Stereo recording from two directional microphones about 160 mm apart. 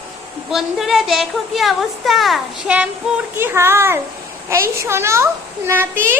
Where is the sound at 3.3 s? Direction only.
15° right (ahead or behind).